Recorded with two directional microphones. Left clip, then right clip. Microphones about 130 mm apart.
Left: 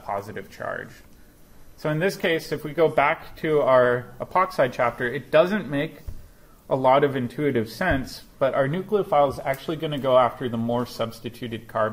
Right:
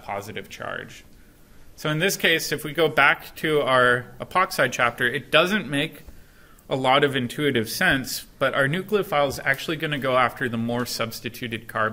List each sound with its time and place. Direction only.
0.0 s speech: 35° right (ahead or behind)
1.8 s speech: 40° right (ahead or behind)